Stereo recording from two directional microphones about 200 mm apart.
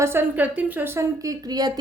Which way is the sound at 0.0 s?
10° right (ahead or behind).